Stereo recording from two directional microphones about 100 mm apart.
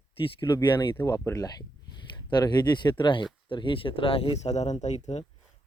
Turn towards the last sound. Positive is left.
turn(degrees=90)